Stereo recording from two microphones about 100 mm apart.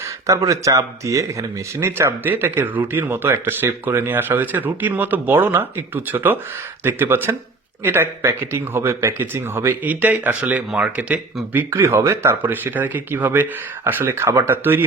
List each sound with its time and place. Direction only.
0.0 s speech: 30° right (ahead or behind); by 11.2 s 10° right (ahead or behind)
11.5 s speech: 25° right (ahead or behind)